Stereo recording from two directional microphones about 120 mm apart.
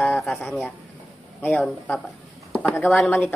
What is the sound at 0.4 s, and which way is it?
Speech, 15° left (ahead or behind).